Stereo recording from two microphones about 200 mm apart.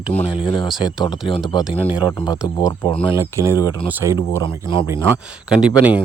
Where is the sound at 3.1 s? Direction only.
15° right (ahead or behind).